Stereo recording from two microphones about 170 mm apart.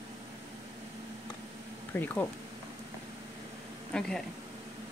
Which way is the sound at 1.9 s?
10° left (ahead or behind).